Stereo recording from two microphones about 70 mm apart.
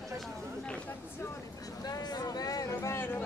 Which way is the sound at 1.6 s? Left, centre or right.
Left.